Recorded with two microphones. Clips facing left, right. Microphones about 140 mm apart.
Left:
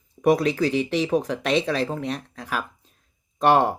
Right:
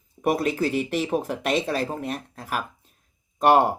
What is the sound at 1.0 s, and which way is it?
A woman's voice, 5° right (ahead or behind).